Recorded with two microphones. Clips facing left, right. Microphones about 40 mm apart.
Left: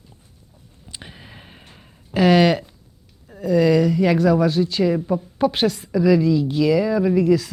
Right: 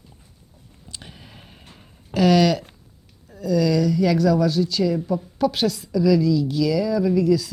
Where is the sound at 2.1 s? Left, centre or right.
Left.